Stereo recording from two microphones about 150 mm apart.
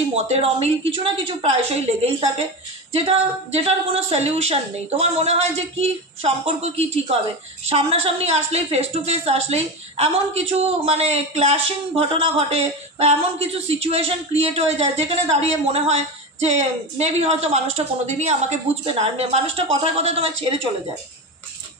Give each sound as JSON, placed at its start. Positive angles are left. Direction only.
{"t": 0.1, "sound": "a woman's voice", "side_deg": -45}
{"t": 17.0, "sound": "a woman's voice", "side_deg": -45}